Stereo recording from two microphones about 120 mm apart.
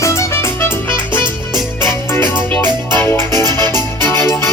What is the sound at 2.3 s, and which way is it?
Music, 15° left (ahead or behind).